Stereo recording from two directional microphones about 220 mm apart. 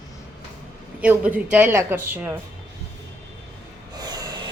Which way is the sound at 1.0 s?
5° right (ahead or behind).